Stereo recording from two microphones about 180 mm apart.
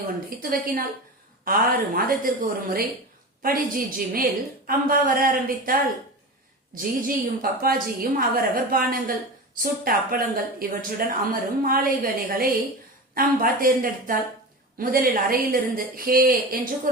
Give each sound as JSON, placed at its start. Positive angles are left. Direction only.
{"t": 0.3, "sound": "speech", "side_deg": -55}
{"t": 6.7, "sound": "speech", "side_deg": -50}